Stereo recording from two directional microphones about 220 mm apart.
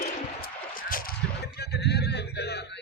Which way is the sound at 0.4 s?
40° left (ahead or behind).